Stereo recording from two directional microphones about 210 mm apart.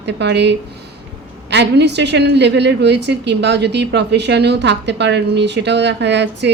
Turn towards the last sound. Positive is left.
turn(degrees=-55)  # may be behind; listen again after turning